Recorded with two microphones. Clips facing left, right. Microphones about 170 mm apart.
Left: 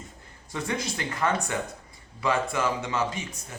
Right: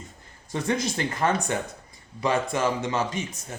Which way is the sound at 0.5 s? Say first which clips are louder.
Right 4 dB; 30° right (ahead or behind).